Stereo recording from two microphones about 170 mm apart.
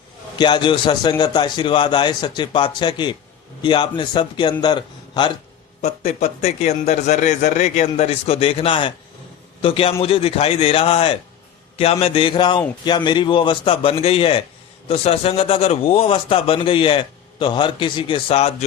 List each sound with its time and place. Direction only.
0.3 s a man's voice: 25° left (ahead or behind)
5.8 s a man's voice: 40° left (ahead or behind)